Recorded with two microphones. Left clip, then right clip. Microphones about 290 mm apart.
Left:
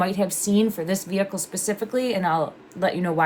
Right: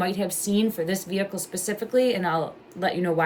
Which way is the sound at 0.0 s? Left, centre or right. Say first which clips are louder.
Left 3 dB; centre.